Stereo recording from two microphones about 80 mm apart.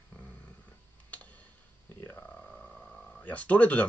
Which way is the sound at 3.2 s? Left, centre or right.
Centre.